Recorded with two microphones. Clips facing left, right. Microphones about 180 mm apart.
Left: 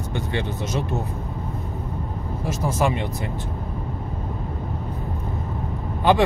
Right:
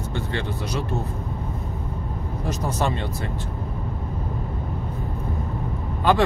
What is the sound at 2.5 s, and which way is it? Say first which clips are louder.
Speech: left 2 dB; 10° left (ahead or behind).